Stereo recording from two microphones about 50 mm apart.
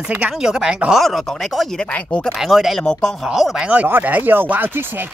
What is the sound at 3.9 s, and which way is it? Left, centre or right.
Speech, right.